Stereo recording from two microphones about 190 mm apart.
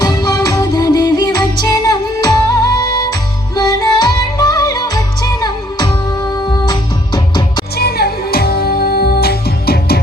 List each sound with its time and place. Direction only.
0.0 s music: 20° left (ahead or behind)
7.8 s music: 55° left (ahead or behind)